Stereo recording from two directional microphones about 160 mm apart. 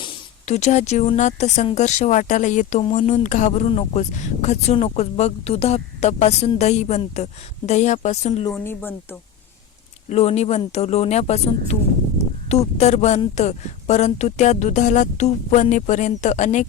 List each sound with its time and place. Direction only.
0.4 s speech: 45° left (ahead or behind)
8.5 s speech: 15° left (ahead or behind)
10.1 s speech: 40° left (ahead or behind)